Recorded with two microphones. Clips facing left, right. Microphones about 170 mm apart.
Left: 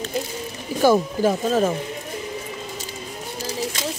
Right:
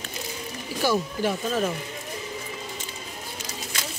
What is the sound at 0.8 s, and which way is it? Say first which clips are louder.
Speech: left 7 dB; 45° left (ahead or behind).